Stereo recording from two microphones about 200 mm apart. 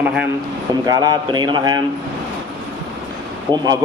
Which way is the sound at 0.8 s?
20° right (ahead or behind).